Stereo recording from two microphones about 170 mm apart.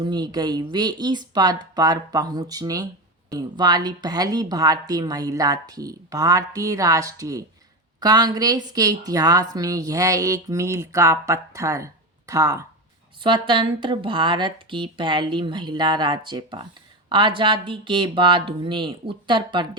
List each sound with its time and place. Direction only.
0.0 s speech: 25° right (ahead or behind)